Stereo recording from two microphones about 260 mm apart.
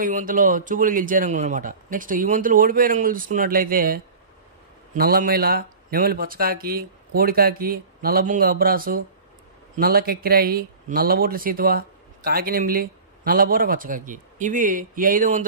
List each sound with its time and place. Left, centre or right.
0.0 s speech: right